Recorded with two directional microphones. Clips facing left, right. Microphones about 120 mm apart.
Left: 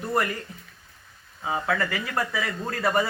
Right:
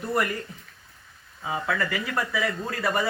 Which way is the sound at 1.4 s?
30° left (ahead or behind).